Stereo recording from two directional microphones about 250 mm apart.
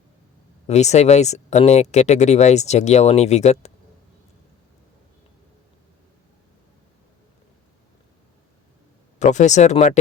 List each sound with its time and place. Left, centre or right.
0.7 s speech: left
9.1 s speech: left